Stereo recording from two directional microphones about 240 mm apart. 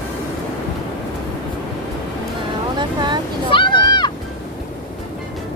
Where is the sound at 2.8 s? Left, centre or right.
Centre.